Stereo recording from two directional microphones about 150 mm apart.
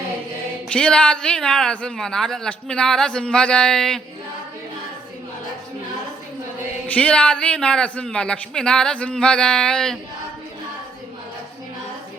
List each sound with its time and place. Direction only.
0.7 s speech: 5° left (ahead or behind)
6.8 s a man's voice: 10° left (ahead or behind)